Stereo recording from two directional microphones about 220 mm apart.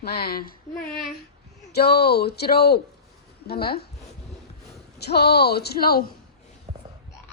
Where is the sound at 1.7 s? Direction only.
45° left (ahead or behind).